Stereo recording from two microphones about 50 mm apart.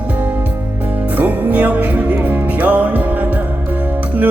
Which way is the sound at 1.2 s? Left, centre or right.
Right.